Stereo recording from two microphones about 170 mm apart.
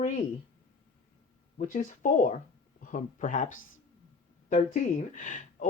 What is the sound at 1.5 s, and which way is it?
Speech, 50° left (ahead or behind).